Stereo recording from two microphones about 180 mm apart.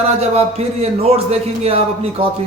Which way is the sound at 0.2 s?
35° right (ahead or behind).